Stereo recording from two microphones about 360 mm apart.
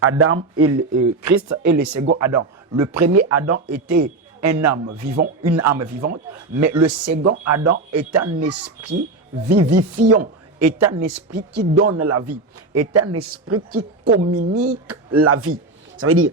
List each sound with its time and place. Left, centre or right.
0.0 s speech: right